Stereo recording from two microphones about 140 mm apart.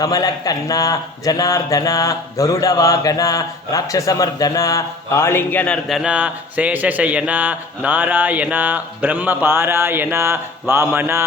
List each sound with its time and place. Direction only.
0.0 s speech: 25° left (ahead or behind); by 6.0 s 5° left (ahead or behind)
6.0 s speech: 10° right (ahead or behind)